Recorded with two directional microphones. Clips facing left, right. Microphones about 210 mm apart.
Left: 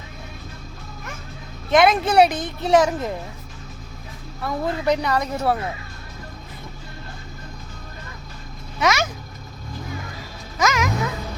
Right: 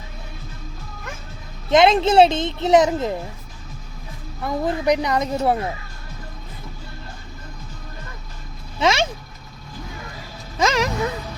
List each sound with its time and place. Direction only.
1.7 s a woman's voice: 25° right (ahead or behind)
4.4 s a woman's voice: 15° right (ahead or behind)
8.8 s a woman's voice: 25° right (ahead or behind)
10.6 s music: 30° right (ahead or behind)